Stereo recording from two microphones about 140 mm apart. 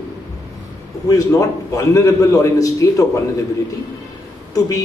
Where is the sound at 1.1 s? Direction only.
25° left (ahead or behind).